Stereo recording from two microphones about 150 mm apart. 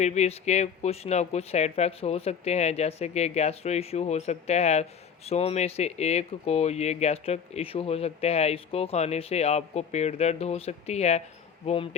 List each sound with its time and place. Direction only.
0.0 s speech: 50° left (ahead or behind)